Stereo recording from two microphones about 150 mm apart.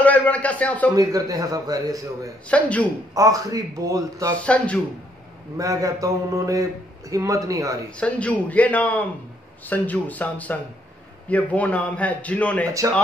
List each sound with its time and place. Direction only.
0.0 s a man's voice: 10° left (ahead or behind)
0.9 s a man's voice: 25° right (ahead or behind)
2.5 s a man's voice: 10° left (ahead or behind)
3.2 s a man's voice: 20° right (ahead or behind)
5.6 s a man's voice: 20° right (ahead or behind)
8.0 s a man's voice: 10° left (ahead or behind)